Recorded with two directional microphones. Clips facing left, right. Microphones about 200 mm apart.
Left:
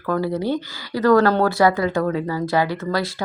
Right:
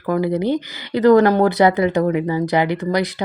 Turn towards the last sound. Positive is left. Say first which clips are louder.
# right 3 dB
turn(degrees=-20)  # may be behind; listen again after turning